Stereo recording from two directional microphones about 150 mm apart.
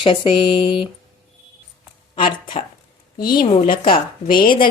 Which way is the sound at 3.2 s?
85° left.